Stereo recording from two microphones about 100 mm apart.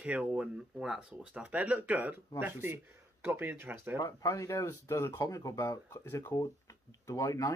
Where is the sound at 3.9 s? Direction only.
35° left (ahead or behind).